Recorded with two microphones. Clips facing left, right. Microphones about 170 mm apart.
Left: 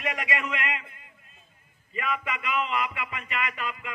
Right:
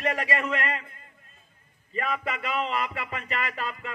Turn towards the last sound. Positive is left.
turn(degrees=-40)  # may be behind; listen again after turning